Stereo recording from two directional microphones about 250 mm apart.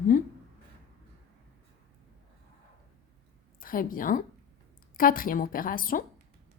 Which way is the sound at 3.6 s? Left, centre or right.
Left.